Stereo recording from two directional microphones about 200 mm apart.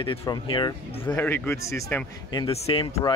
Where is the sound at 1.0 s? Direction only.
10° left (ahead or behind).